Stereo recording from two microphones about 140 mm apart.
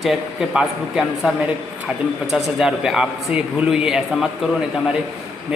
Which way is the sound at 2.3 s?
5° right (ahead or behind).